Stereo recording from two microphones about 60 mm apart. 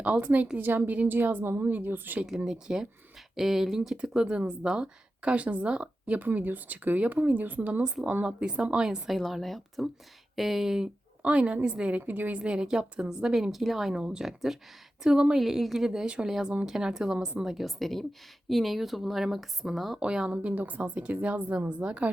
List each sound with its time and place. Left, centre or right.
0.0 s a woman's voice: right
2.2 s a woman's voice: centre
6.1 s speech: right
8.0 s a woman's voice: centre
9.1 s speech: centre
11.2 s speech: centre
12.4 s a woman's voice: centre
20.0 s speech: centre